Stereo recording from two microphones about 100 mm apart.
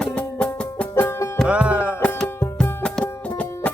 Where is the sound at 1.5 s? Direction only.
10° right (ahead or behind).